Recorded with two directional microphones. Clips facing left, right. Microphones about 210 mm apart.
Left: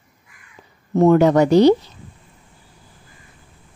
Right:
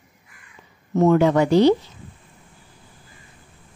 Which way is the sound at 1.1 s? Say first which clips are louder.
Left 3 dB; 40° left (ahead or behind).